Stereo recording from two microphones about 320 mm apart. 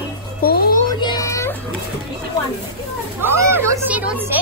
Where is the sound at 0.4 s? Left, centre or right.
Left.